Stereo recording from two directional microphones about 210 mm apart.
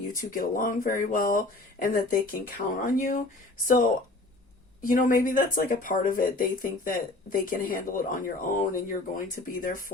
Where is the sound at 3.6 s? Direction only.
40° left (ahead or behind).